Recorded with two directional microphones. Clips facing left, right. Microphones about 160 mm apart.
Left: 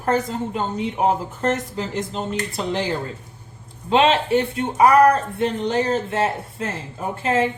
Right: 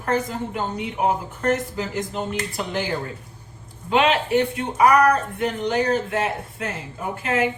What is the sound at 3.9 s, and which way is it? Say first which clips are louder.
A woman's voice: left 2 dB; 30° left (ahead or behind).